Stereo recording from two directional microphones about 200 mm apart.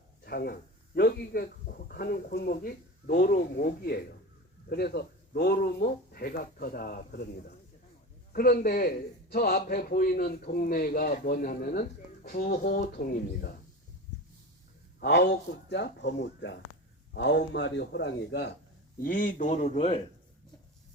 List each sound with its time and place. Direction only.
0.3 s a man's voice: 50° left (ahead or behind)
15.0 s speech: 55° left (ahead or behind)
18.9 s speech: 45° left (ahead or behind)